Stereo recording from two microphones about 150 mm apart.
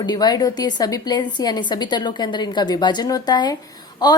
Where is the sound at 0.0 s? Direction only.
25° left (ahead or behind).